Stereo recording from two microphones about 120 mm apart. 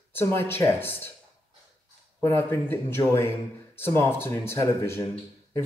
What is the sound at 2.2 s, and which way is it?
Speech, 20° left (ahead or behind).